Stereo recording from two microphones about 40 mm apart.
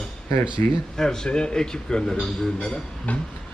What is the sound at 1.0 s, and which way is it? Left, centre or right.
Speech, centre.